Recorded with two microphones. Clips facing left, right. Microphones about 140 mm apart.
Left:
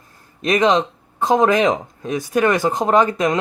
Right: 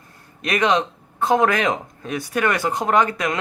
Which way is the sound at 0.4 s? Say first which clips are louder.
Left 4 dB; 25° left (ahead or behind).